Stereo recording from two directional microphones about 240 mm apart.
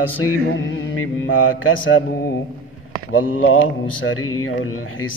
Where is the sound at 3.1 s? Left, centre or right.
Left.